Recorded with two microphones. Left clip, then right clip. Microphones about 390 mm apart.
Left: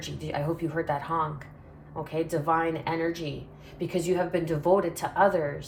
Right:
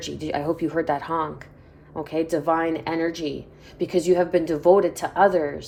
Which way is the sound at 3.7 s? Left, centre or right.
Right.